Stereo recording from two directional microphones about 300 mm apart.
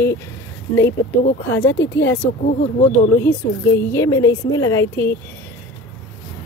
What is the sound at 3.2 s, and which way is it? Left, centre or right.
A woman's voice, centre.